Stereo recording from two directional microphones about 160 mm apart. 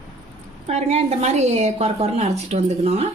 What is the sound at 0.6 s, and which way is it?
A woman's voice, 40° right (ahead or behind).